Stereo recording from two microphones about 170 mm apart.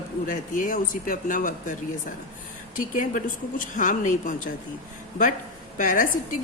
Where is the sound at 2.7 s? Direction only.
50° left (ahead or behind).